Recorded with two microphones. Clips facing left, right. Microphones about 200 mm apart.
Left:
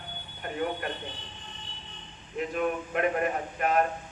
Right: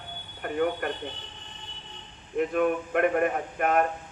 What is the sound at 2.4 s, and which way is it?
A man's voice, 55° right (ahead or behind).